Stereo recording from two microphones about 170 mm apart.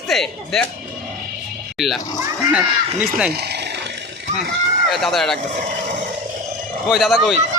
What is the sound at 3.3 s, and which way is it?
Speech, 75° right (ahead or behind).